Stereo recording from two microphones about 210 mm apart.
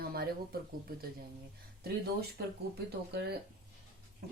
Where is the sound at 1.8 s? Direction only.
50° right (ahead or behind).